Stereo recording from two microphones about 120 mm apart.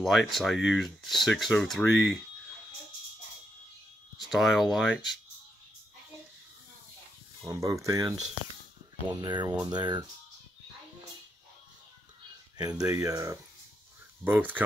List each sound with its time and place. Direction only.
0.0 s speech: centre (ahead or behind)
4.3 s speech: centre (ahead or behind)
7.4 s speech: 25° right (ahead or behind)
12.5 s speech: 30° right (ahead or behind)
14.2 s speech: 15° right (ahead or behind)